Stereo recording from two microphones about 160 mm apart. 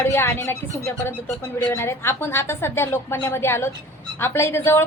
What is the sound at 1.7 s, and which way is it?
A woman's voice, 15° left (ahead or behind).